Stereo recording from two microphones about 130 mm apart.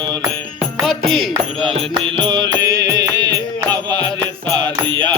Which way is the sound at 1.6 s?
45° right (ahead or behind).